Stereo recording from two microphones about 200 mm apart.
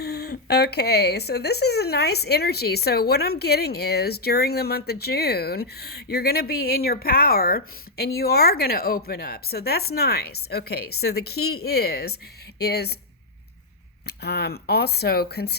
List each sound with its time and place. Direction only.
0.0 s speech: 50° left (ahead or behind)
14.2 s speech: 55° left (ahead or behind)